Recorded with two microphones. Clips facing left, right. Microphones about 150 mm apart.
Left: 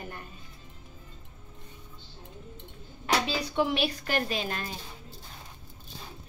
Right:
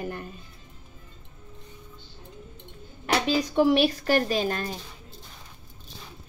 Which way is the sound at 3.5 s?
40° right (ahead or behind).